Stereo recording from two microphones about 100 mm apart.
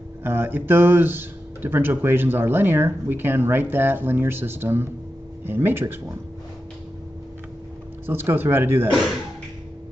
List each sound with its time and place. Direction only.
0.2 s speech: 20° right (ahead or behind)
8.1 s speech: 20° right (ahead or behind)